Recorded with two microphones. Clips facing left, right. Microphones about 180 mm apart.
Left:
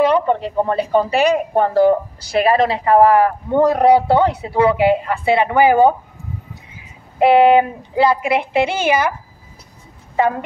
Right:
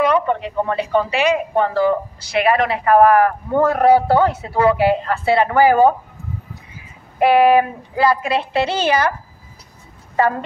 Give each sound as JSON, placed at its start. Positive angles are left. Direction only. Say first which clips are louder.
{"t": 0.0, "sound": "a man's voice", "louder": "left 2 dB", "side_deg": 30}
{"t": 7.2, "sound": "a man's voice", "louder": "left 2 dB", "side_deg": 25}